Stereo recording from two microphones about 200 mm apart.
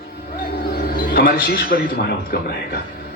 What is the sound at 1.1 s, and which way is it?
Speech, 50° left (ahead or behind).